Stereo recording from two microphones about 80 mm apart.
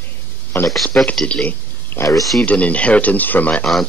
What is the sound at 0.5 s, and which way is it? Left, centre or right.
Speech, left.